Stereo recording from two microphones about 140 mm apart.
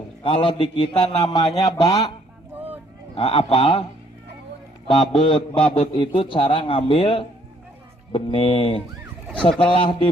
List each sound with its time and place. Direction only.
0.2 s a man's voice: 40° left (ahead or behind)
2.6 s a sound: 15° right (ahead or behind)
3.2 s a man's voice: 40° left (ahead or behind)
4.9 s a man's voice: 35° left (ahead or behind)